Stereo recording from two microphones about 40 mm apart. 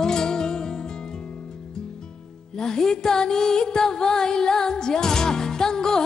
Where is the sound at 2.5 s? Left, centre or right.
Centre.